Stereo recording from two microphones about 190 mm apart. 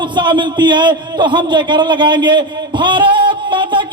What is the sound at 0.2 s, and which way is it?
A man's voice, 25° right (ahead or behind).